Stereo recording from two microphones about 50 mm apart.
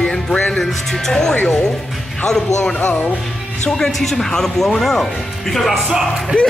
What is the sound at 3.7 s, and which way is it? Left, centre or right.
Speech, centre.